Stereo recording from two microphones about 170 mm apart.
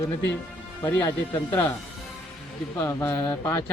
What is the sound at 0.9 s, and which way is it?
Speech, 20° left (ahead or behind).